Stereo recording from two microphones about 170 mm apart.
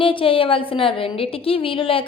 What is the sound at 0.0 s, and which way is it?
A woman's voice, 30° left (ahead or behind).